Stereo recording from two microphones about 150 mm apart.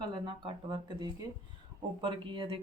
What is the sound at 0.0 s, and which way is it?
Speech, 30° right (ahead or behind).